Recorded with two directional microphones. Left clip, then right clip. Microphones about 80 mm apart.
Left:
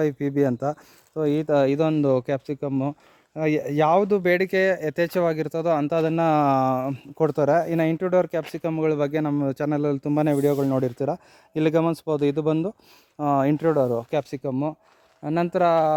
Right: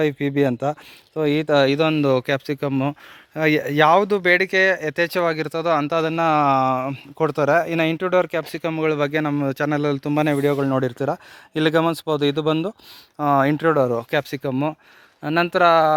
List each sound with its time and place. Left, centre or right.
0.2 s speech: left
2.5 s speech: centre; by 4.1 s left
4.1 s speech: left
6.7 s speech: left
13.6 s speech: centre
15.2 s speech: centre